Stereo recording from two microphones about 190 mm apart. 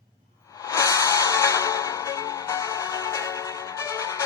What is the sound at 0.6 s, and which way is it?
Music, 15° left (ahead or behind).